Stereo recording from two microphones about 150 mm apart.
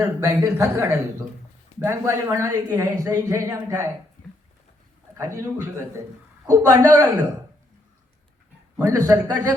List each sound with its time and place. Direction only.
0.0 s speech: 20° right (ahead or behind)
5.1 s a man's voice: 20° right (ahead or behind)
6.7 s speech: 20° right (ahead or behind)
8.9 s speech: 20° right (ahead or behind)